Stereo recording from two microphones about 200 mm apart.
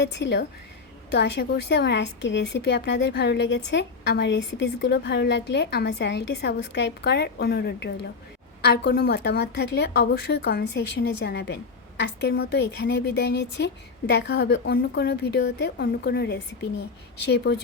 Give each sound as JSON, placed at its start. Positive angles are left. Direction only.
{"t": 0.0, "sound": "a woman's voice", "side_deg": 60}